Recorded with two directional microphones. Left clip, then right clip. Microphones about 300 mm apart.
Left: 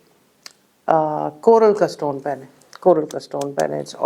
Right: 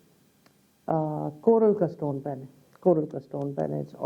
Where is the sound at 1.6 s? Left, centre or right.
Centre.